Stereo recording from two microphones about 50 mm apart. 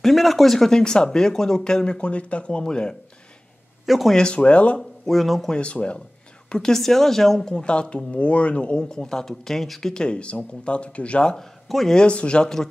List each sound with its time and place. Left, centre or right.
0.0 s speech: centre
3.8 s speech: centre
4.1 s speech: centre
4.7 s speech: centre
5.5 s speech: left
6.5 s speech: centre
8.8 s speech: centre
11.3 s a man's voice: centre
12.0 s speech: left